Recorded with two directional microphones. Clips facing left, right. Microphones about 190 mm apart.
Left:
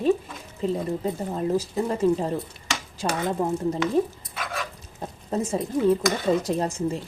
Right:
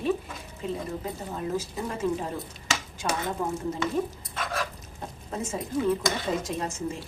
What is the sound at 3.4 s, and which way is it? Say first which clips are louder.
Stir: left 7 dB; 30° left (ahead or behind).